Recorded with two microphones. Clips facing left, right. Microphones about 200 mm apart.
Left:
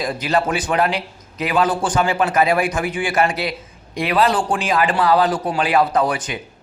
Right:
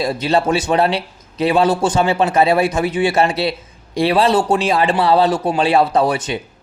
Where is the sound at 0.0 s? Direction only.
25° right (ahead or behind).